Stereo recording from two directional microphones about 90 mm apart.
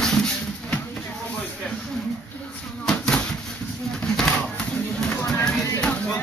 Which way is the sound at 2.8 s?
5° left (ahead or behind).